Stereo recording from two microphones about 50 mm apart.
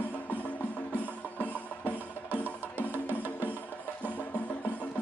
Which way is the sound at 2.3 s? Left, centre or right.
Right.